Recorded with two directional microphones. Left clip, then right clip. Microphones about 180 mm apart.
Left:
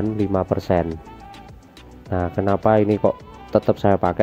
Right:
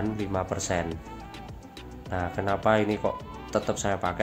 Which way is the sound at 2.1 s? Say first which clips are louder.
Left 7 dB; 40° left (ahead or behind).